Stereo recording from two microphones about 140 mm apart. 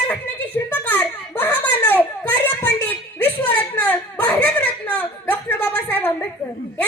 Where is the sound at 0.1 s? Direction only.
15° left (ahead or behind).